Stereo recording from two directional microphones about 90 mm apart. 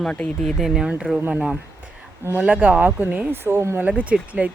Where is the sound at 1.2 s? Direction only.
20° right (ahead or behind).